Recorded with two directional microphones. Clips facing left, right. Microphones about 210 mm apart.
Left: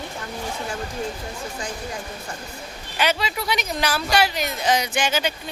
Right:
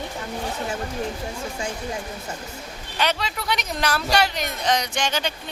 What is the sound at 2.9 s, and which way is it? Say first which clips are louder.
Speech: left 2 dB; 5° left (ahead or behind).